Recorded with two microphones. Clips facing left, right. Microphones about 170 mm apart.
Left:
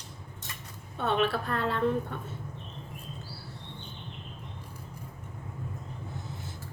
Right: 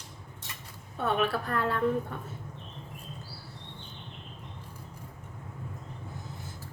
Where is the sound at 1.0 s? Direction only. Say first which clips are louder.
Left 1 dB; 25° left (ahead or behind).